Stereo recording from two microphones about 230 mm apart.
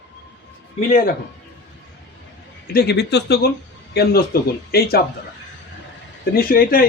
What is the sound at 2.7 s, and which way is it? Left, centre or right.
Speech, left.